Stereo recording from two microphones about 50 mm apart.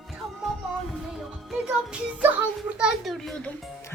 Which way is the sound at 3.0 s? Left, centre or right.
Centre.